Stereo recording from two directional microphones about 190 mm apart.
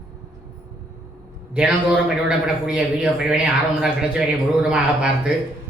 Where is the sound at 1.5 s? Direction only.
5° right (ahead or behind).